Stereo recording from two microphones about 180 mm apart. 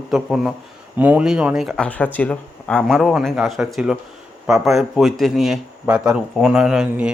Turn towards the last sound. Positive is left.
turn(degrees=-5)  # may be behind; listen again after turning